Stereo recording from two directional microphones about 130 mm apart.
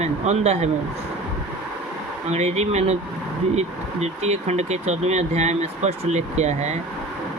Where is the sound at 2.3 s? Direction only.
60° right (ahead or behind).